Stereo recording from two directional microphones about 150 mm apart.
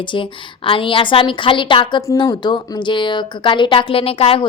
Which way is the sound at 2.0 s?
20° left (ahead or behind).